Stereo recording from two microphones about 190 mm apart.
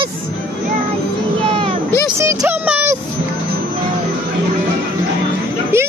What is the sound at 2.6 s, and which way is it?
Music, 10° right (ahead or behind).